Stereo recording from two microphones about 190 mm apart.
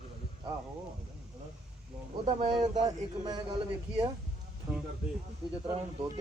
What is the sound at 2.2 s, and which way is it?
A man's voice, 30° right (ahead or behind).